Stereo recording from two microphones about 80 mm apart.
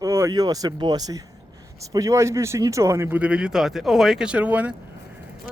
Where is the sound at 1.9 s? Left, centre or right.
Right.